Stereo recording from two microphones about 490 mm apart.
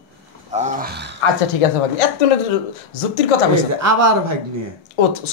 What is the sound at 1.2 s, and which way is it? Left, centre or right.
Speech, left.